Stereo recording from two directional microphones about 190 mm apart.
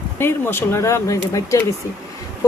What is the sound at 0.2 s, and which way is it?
Speech, 10° left (ahead or behind).